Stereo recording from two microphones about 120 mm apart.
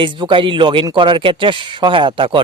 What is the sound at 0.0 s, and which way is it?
Speech, 40° right (ahead or behind).